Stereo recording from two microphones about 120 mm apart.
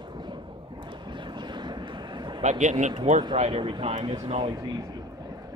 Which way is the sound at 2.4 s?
75° right (ahead or behind).